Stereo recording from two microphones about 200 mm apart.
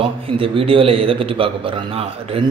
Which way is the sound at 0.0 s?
25° right (ahead or behind).